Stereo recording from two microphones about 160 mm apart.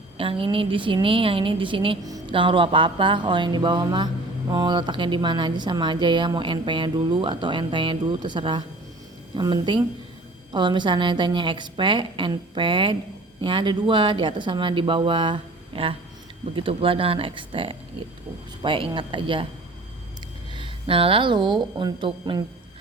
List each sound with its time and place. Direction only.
0.2 s a woman's voice: 35° right (ahead or behind)
20.5 s speech: 30° right (ahead or behind)